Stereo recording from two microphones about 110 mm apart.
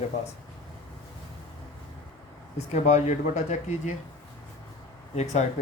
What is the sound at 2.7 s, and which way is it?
Speech, 90° left.